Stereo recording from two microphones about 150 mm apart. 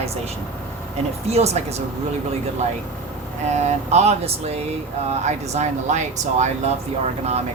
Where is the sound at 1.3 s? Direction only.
45° right (ahead or behind).